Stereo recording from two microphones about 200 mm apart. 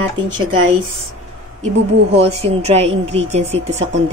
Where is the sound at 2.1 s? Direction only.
30° right (ahead or behind).